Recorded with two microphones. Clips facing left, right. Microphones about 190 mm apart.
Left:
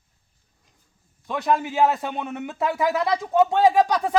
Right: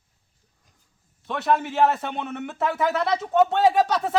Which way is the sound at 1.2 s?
Centre (ahead or behind).